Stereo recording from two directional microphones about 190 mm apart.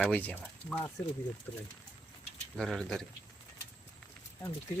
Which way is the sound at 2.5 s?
Centre (ahead or behind).